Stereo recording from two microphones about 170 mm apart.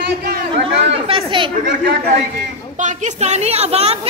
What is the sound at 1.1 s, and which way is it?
Speech, 30° right (ahead or behind).